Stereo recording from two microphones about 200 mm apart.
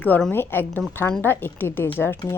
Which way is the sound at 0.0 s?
10° left (ahead or behind).